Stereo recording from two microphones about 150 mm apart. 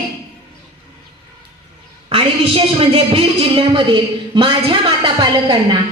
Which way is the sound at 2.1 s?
40° right (ahead or behind).